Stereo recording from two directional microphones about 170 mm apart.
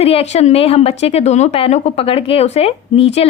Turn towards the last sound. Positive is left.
turn(degrees=35)  # may be behind; listen again after turning